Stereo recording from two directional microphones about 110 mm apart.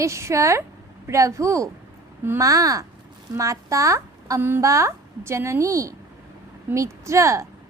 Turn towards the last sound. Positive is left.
turn(degrees=-30)  # may be behind; listen again after turning